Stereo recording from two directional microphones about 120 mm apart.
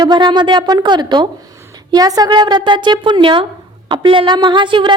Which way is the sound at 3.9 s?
45° right (ahead or behind).